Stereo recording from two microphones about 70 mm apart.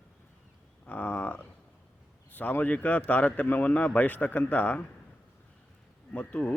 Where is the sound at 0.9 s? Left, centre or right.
Left.